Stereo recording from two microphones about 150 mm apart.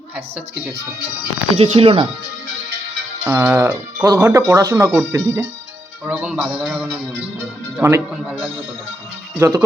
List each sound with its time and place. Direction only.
1.5 s speech: 40° right (ahead or behind)
3.2 s speech: 15° right (ahead or behind)
6.6 s music: 5° right (ahead or behind)
7.8 s speech: 15° right (ahead or behind)
9.4 s speech: 20° right (ahead or behind)